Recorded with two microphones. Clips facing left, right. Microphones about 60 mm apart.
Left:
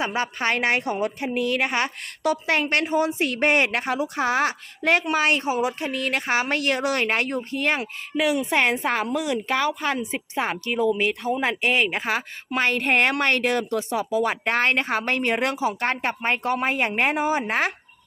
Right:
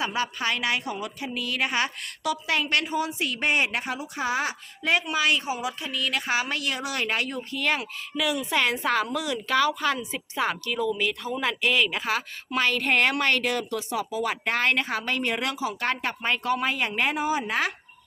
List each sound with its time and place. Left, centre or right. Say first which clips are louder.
0.0 s a woman's voice: left 3 dB; left